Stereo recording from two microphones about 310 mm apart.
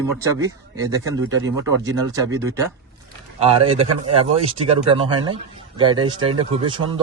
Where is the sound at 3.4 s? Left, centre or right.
Centre.